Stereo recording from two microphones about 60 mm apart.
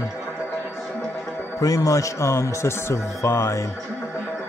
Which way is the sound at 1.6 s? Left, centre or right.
Left.